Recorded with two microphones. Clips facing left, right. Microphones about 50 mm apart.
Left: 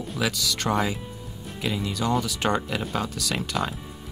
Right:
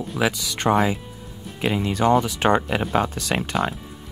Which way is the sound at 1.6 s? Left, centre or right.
Right.